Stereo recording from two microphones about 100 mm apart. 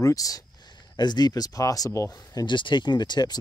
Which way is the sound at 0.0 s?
35° left (ahead or behind).